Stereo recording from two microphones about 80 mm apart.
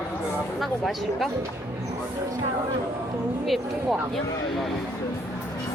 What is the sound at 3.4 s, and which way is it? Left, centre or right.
Speech, centre.